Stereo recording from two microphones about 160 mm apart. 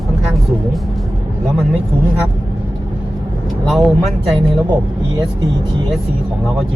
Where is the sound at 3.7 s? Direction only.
Centre (ahead or behind).